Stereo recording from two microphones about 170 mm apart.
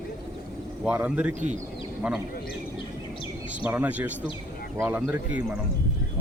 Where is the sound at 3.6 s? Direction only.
10° right (ahead or behind).